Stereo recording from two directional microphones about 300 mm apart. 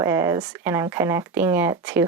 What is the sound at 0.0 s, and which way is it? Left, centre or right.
Speech, centre.